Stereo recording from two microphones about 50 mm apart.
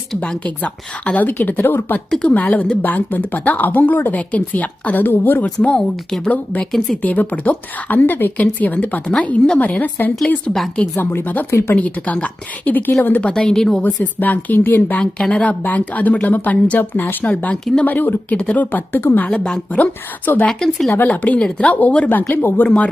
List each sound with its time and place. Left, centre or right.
0.2 s a woman's voice: left
2.2 s a woman's voice: left
6.7 s a woman's voice: centre
7.0 s a woman's voice: left
10.9 s speech: left
11.8 s a woman's voice: left
13.3 s a woman's voice: centre
13.8 s a woman's voice: left
17.2 s speech: left
17.8 s a woman's voice: left
20.5 s a woman's voice: centre
21.1 s speech: left
22.3 s a woman's voice: left